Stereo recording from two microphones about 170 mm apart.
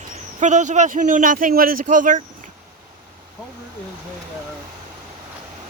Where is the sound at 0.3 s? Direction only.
45° right (ahead or behind).